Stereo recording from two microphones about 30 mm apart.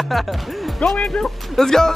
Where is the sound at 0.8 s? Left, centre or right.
Centre.